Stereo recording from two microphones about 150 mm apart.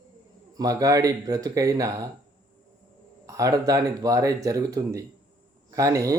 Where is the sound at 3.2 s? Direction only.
20° right (ahead or behind).